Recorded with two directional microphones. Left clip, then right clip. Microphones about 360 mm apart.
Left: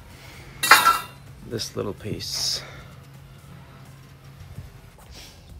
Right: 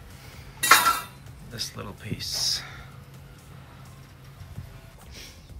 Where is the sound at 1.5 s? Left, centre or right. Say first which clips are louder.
Left 6 dB; centre.